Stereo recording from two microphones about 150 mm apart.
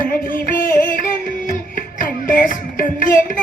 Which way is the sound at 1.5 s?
65° left (ahead or behind).